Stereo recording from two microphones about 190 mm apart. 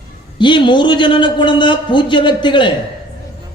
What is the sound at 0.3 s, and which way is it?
A man's voice, 25° left (ahead or behind).